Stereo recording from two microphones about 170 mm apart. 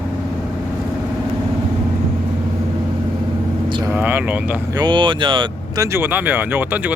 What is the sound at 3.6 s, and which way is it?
Vehicle, 25° right (ahead or behind).